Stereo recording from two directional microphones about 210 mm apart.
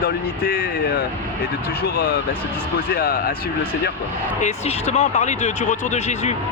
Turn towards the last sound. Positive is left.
turn(degrees=30)  # may be behind; listen again after turning